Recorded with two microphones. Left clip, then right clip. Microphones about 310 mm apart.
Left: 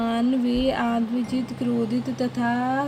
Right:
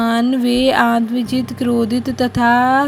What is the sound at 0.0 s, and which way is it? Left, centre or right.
Speech, right.